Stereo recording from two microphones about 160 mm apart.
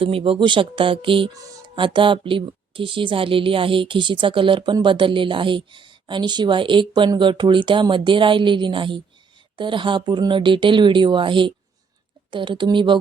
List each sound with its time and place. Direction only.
0.0 s speech: 35° right (ahead or behind)